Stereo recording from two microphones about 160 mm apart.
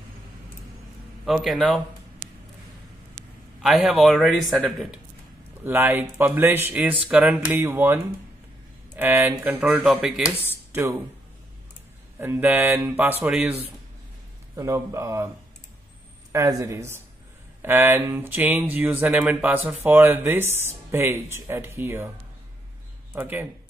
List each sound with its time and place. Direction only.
1.2 s a man's voice: centre (ahead or behind)
3.6 s a man's voice: centre (ahead or behind)
5.6 s speech: 10° right (ahead or behind)
10.7 s speech: 15° right (ahead or behind)
12.2 s speech: 10° right (ahead or behind)
14.5 s speech: 20° right (ahead or behind)
16.3 s speech: 20° right (ahead or behind)
23.1 s speech: 15° right (ahead or behind)